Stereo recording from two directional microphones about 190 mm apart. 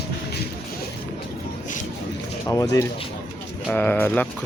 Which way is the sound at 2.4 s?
15° left (ahead or behind).